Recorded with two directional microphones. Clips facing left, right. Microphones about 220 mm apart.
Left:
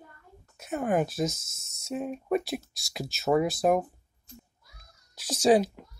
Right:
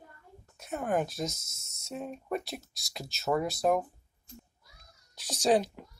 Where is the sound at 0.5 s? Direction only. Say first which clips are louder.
Left 4 dB; 5° left (ahead or behind).